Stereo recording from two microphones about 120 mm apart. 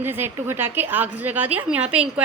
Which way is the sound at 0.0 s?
20° right (ahead or behind).